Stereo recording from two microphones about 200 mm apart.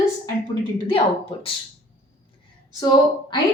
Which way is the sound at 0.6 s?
25° left (ahead or behind).